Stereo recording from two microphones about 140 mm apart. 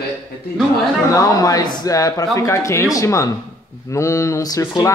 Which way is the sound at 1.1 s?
25° left (ahead or behind).